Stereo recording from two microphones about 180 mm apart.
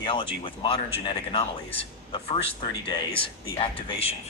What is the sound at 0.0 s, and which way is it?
Speech, 25° left (ahead or behind).